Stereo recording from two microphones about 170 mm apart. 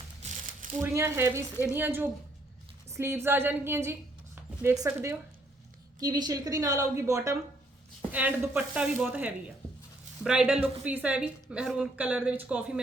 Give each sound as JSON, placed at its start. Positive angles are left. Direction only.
{"t": 0.8, "sound": "a woman's voice", "side_deg": -15}